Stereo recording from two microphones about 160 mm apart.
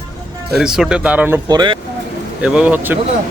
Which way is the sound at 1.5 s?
25° right (ahead or behind).